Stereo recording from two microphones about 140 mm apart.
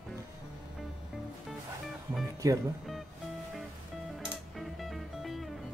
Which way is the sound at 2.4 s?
25° right (ahead or behind).